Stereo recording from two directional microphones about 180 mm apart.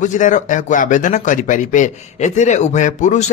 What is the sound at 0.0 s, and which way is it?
Speech, 45° left (ahead or behind).